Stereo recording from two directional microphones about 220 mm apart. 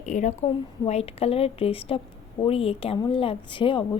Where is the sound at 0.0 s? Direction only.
35° left (ahead or behind).